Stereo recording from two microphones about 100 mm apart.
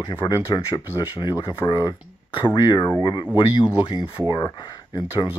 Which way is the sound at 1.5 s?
45° left (ahead or behind).